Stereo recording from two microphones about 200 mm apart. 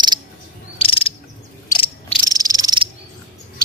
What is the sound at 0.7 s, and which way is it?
Insect, 25° left (ahead or behind).